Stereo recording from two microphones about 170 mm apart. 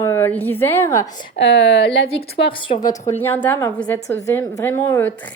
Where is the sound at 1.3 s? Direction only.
90° left.